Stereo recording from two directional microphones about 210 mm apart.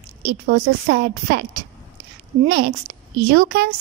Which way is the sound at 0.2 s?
50° right (ahead or behind).